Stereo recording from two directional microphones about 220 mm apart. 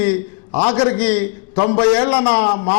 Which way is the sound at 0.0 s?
10° left (ahead or behind).